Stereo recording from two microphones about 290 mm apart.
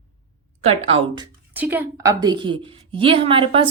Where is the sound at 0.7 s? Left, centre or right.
Centre.